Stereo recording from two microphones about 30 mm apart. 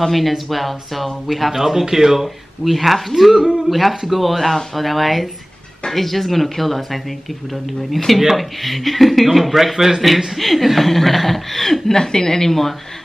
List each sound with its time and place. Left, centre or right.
0.0 s speech: centre
1.5 s speech: centre
3.3 s speech: centre
3.6 s speech: centre
11.9 s a woman's voice: left